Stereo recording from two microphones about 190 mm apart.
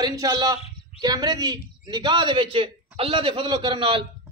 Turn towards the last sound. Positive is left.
turn(degrees=-25)  # may be behind; listen again after turning